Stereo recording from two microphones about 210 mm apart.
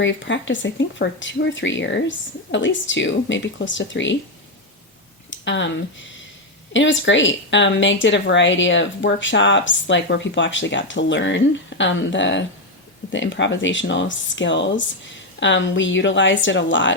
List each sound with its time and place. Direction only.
0.0 s speech: 60° left (ahead or behind)
5.3 s a sound: 60° left (ahead or behind)
6.7 s speech: 60° left (ahead or behind)